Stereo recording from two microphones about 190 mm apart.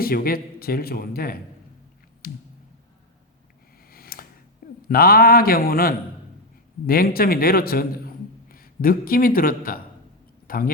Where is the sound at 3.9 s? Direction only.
50° left (ahead or behind).